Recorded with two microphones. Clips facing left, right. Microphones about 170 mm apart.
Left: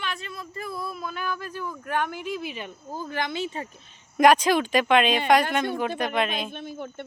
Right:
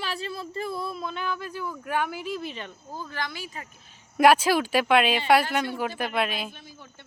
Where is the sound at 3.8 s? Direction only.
5° right (ahead or behind).